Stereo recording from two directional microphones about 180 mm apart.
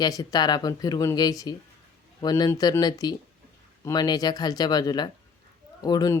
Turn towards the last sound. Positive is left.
turn(degrees=20)  # may be behind; listen again after turning